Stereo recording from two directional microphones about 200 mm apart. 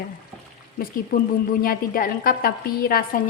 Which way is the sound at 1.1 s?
45° left (ahead or behind).